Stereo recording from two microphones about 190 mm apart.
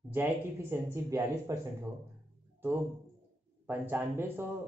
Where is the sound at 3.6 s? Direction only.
10° right (ahead or behind).